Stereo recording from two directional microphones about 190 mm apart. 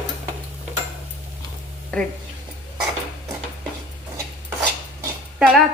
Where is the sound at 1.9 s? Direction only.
5° left (ahead or behind).